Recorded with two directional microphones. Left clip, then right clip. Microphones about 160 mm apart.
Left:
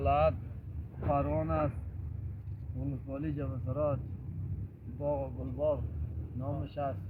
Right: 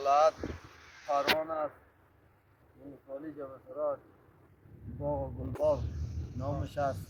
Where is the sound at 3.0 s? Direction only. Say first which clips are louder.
Left 1 dB; 10° right (ahead or behind).